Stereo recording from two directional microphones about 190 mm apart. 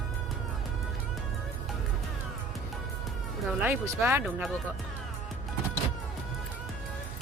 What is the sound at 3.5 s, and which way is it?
Speech, 5° right (ahead or behind).